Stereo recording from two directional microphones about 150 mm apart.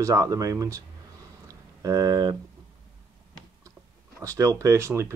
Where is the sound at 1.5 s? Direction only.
25° right (ahead or behind).